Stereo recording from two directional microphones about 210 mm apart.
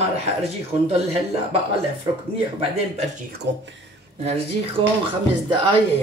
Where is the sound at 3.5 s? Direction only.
55° right (ahead or behind).